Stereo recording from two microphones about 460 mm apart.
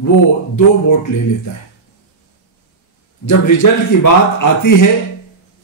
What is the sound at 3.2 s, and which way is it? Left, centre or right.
A man's voice, left.